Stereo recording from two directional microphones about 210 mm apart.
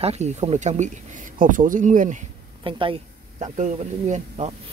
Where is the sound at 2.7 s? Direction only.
25° right (ahead or behind).